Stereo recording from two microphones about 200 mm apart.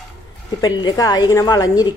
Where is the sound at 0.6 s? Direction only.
20° left (ahead or behind).